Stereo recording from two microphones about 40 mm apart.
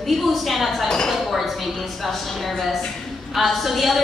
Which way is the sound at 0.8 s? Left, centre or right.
Centre.